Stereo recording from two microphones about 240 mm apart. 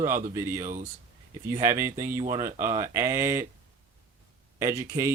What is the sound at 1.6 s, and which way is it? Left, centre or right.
Speech, centre.